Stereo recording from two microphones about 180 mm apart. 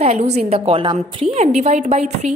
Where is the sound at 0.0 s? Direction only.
35° right (ahead or behind).